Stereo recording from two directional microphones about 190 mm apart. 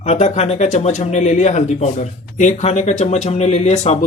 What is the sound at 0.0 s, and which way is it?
Speech, 35° left (ahead or behind).